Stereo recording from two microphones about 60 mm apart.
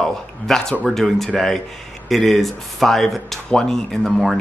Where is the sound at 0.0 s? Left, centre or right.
Centre.